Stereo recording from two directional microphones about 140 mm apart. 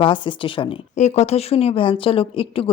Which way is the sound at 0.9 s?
55° left (ahead or behind).